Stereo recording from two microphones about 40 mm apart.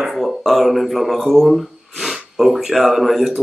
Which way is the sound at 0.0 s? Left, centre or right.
Centre.